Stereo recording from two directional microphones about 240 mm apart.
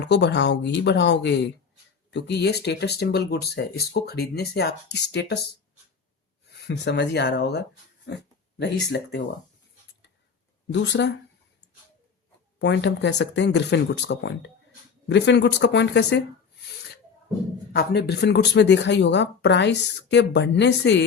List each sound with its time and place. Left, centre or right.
0.0 s speech: left
6.7 s speech: left
10.7 s speech: left
12.5 s speech: left
17.7 s speech: left